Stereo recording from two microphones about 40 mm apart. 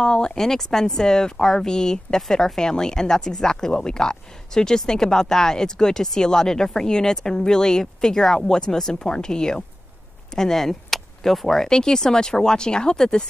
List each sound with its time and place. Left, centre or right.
0.0 s speech: left
0.4 s speech: centre